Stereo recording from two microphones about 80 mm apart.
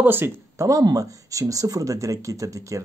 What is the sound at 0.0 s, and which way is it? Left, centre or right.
Speech, right.